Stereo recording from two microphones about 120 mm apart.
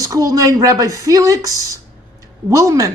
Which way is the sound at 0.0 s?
30° right (ahead or behind).